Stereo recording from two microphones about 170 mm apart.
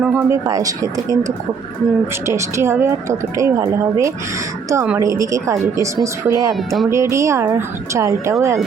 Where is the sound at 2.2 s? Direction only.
15° right (ahead or behind).